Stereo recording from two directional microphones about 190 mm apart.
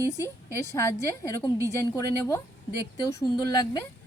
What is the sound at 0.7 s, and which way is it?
Speech, 15° left (ahead or behind).